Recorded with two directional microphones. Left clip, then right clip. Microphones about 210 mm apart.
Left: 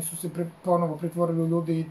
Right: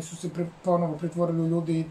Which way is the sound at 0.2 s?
5° left (ahead or behind).